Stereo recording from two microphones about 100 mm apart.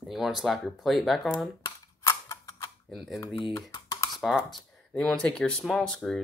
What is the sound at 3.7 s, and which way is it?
Computer keyboard, 40° left (ahead or behind).